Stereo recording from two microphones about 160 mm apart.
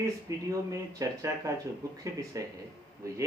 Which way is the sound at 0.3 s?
20° right (ahead or behind).